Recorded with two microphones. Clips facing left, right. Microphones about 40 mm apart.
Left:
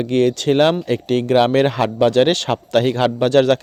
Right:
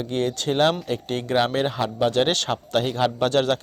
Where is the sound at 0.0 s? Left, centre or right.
Left.